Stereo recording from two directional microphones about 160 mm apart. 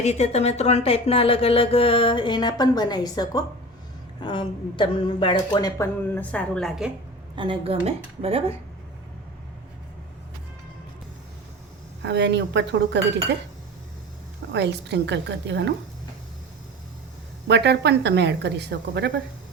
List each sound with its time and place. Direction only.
0.0 s a woman's voice: 45° left (ahead or behind); by 6.9 s centre (ahead or behind)
7.3 s speech: 35° right (ahead or behind)
12.0 s a woman's voice: 90° right
14.5 s a woman's voice: 90° right
17.5 s a woman's voice: 90° right